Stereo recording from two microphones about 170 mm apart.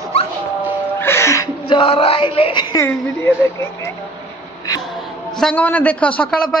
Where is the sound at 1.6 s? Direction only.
30° left (ahead or behind).